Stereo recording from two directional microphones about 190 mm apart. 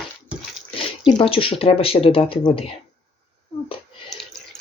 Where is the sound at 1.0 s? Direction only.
30° left (ahead or behind).